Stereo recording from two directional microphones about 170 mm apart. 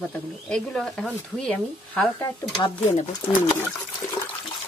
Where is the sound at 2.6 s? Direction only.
40° left (ahead or behind).